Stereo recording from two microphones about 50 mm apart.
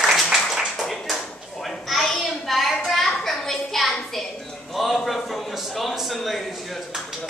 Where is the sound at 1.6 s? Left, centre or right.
Centre.